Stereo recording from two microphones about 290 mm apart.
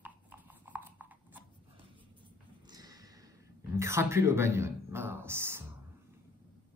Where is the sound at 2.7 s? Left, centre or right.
Centre.